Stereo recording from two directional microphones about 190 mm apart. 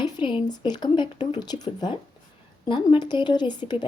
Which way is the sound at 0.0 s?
25° left (ahead or behind).